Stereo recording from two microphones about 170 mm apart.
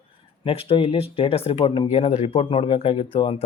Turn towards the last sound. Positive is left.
turn(degrees=35)  # may be behind; listen again after turning